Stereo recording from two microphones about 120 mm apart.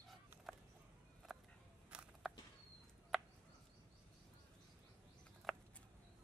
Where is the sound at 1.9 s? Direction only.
10° right (ahead or behind).